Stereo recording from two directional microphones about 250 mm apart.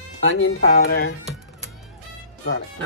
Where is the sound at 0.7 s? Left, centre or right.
Left.